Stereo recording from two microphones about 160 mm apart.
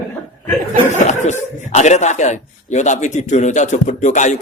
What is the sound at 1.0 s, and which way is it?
Speech, 45° left (ahead or behind).